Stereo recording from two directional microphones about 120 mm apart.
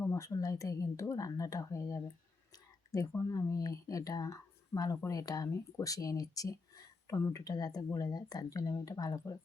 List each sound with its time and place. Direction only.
0.0 s speech: 25° left (ahead or behind)